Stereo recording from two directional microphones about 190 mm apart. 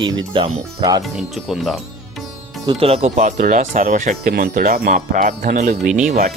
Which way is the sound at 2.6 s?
30° right (ahead or behind).